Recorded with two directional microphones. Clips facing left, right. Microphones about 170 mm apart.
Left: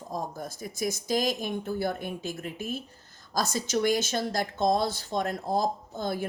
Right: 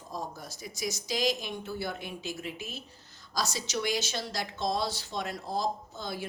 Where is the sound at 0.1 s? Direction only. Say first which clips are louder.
Left 4 dB; 50° left (ahead or behind).